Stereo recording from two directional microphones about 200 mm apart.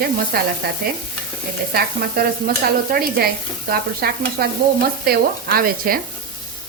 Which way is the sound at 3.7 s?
50° right (ahead or behind).